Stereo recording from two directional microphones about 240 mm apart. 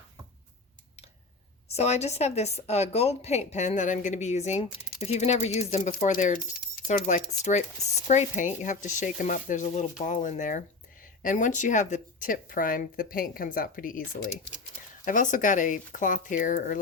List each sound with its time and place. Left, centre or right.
1.6 s a woman's voice: left